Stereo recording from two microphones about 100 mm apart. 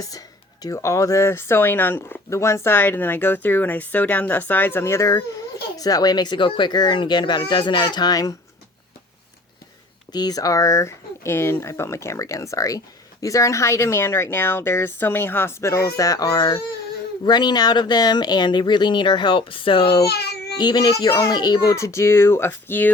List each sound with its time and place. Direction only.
0.0 s speech: 40° left (ahead or behind)
10.1 s speech: 40° left (ahead or behind); by 20.0 s 60° left (ahead or behind)
20.6 s speech: 45° left (ahead or behind)
21.8 s speech: 30° left (ahead or behind)